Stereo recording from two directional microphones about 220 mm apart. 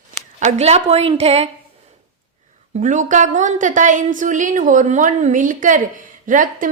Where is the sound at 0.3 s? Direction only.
30° right (ahead or behind).